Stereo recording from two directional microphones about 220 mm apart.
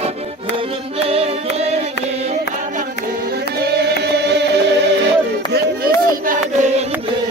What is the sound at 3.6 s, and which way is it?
Music, 50° right (ahead or behind).